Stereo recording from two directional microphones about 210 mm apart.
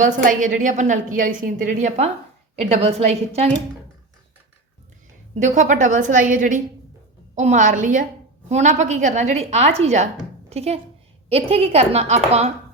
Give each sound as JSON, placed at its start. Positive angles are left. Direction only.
{"t": 0.0, "sound": "a woman's voice", "side_deg": -40}
{"t": 5.3, "sound": "a woman's voice", "side_deg": -35}